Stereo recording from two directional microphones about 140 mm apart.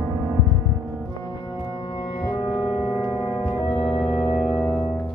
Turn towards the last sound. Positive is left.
turn(degrees=0)  # may be behind; listen again after turning